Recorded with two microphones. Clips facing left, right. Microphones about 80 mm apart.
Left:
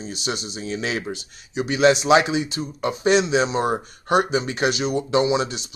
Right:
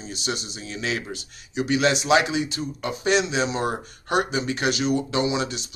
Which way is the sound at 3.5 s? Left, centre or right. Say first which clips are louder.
Left 4 dB; left.